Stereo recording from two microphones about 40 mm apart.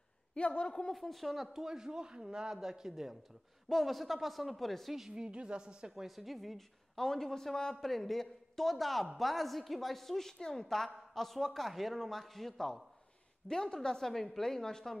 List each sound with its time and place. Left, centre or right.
0.3 s a woman's voice: left
0.9 s speech: centre
3.6 s a woman's voice: centre
5.1 s speech: right
5.9 s a woman's voice: centre
13.5 s a woman's voice: centre